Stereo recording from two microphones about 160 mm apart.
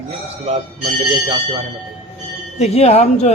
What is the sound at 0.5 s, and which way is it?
Speech, 40° right (ahead or behind).